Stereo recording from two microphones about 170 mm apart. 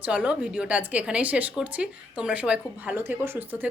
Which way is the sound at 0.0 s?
10° right (ahead or behind).